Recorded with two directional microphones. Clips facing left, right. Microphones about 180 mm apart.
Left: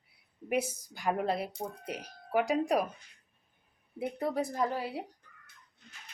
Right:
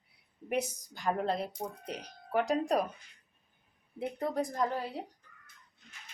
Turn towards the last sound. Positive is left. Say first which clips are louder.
# left 1 dB
turn(degrees=10)  # may be behind; listen again after turning